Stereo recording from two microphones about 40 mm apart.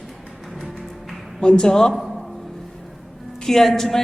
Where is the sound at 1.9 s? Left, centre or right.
Centre.